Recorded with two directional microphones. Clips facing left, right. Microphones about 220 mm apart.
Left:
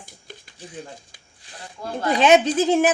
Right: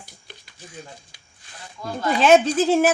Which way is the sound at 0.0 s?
50° left (ahead or behind).